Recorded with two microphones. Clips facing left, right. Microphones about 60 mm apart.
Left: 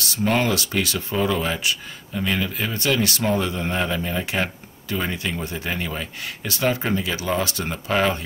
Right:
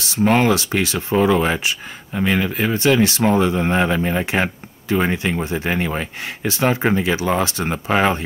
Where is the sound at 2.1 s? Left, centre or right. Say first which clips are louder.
Right 5 dB; right.